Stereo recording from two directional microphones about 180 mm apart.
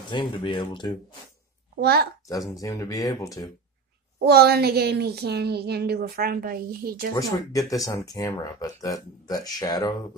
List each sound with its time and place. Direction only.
0.1 s speech: 25° left (ahead or behind)
1.8 s speech: 60° right (ahead or behind)
2.4 s speech: 20° left (ahead or behind)
4.2 s speech: 60° right (ahead or behind)
7.5 s speech: 20° left (ahead or behind)